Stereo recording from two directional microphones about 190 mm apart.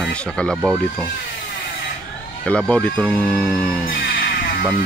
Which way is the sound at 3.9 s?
50° left (ahead or behind).